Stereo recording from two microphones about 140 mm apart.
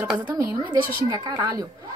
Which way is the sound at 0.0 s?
15° right (ahead or behind).